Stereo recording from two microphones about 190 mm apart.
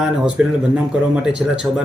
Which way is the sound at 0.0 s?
5° right (ahead or behind).